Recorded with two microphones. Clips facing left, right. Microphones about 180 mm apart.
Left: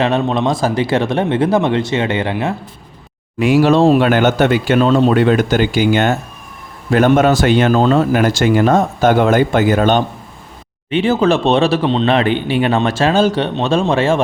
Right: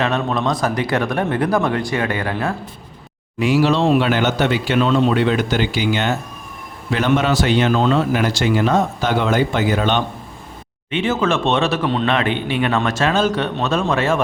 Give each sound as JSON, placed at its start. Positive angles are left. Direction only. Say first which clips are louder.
{"t": 0.0, "sound": "speech", "louder": "left 4 dB", "side_deg": 30}
{"t": 3.3, "sound": "speech", "louder": "left 5 dB", "side_deg": 55}
{"t": 10.9, "sound": "speech", "louder": "left 5 dB", "side_deg": 35}